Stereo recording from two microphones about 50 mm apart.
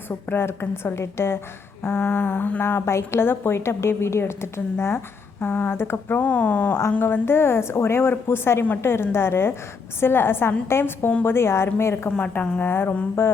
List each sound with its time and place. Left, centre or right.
0.1 s a woman's voice: left
3.2 s a woman's voice: left
5.4 s speech: left
6.2 s a woman's voice: left
12.0 s speech: left
12.6 s speech: left